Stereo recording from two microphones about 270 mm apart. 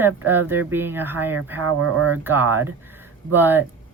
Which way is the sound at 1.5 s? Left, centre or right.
Right.